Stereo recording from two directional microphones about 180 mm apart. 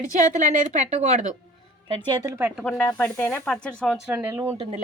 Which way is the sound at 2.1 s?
20° right (ahead or behind).